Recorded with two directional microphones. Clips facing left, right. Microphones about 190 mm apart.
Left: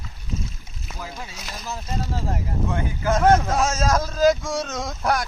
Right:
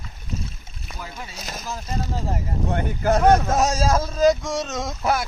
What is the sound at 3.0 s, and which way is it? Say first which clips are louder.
Speech: right 1 dB; 40° right (ahead or behind).